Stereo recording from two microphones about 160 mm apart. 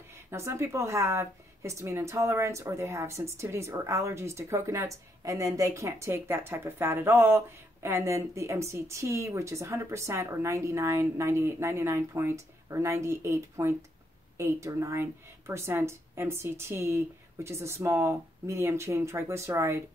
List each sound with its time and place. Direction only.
0.1 s speech: 15° right (ahead or behind)